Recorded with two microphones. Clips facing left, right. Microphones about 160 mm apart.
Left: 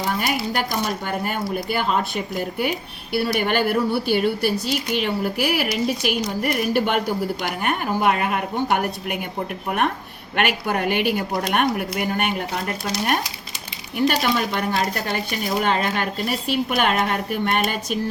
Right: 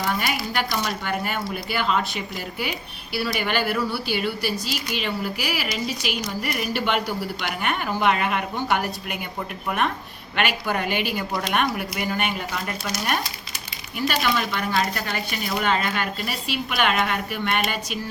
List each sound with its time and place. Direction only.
0.5 s speech: 45° left (ahead or behind)
8.7 s speech: 55° left (ahead or behind)
14.0 s speech: 40° left (ahead or behind)